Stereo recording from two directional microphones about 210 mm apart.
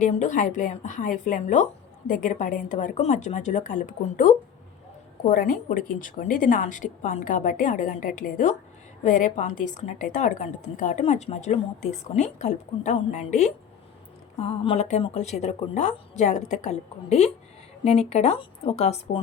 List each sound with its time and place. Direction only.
0.0 s a woman's voice: 35° left (ahead or behind)